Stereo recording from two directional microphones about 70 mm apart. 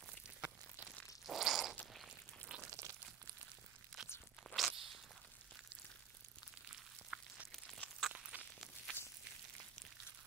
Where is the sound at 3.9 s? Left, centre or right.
Centre.